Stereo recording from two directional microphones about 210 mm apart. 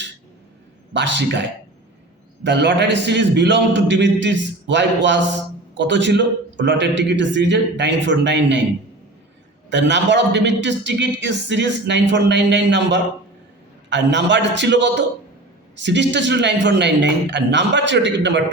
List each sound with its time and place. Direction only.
0.9 s a man's voice: 55° right (ahead or behind)
9.6 s a man's voice: 60° right (ahead or behind)